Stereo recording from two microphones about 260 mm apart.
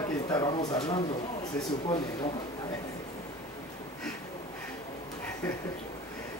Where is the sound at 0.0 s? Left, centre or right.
Centre.